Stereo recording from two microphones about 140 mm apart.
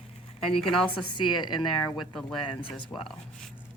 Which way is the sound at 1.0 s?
35° left (ahead or behind).